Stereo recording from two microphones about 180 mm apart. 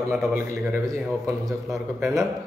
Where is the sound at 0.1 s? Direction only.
Centre (ahead or behind).